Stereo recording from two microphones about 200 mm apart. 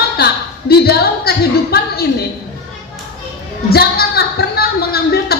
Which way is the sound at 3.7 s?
50° left (ahead or behind).